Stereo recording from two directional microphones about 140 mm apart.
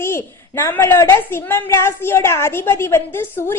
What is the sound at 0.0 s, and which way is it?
A woman's voice, 15° left (ahead or behind).